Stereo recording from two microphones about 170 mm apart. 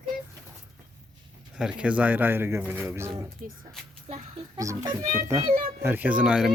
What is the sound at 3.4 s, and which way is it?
Speech, 50° right (ahead or behind).